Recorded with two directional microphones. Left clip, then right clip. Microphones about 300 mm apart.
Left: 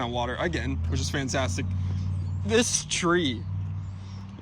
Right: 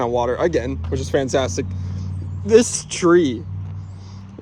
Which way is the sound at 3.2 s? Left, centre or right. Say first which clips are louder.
Right 10 dB; centre.